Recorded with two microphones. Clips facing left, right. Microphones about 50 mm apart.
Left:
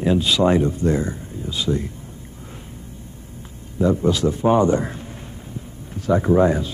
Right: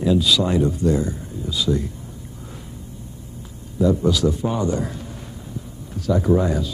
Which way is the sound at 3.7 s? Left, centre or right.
Left.